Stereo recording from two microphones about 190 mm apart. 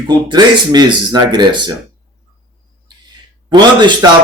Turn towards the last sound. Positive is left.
turn(degrees=-20)  # may be behind; listen again after turning